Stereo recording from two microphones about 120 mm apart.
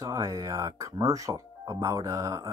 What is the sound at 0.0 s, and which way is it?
Speech, 30° right (ahead or behind).